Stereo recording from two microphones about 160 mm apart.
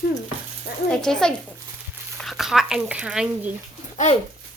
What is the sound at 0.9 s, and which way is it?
Speech, 5° left (ahead or behind).